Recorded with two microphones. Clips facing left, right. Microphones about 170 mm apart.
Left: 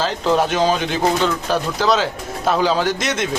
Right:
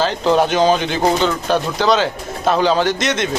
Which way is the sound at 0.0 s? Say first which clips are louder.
Right 3 dB; centre (ahead or behind).